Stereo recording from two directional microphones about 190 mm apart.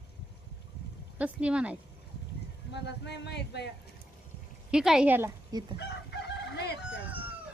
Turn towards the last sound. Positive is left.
turn(degrees=60)  # may be behind; listen again after turning